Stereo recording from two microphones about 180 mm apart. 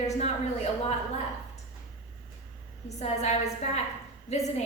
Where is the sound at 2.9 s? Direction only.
40° left (ahead or behind).